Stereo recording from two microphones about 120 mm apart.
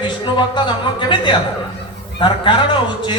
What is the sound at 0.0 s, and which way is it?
A man's voice, 40° left (ahead or behind).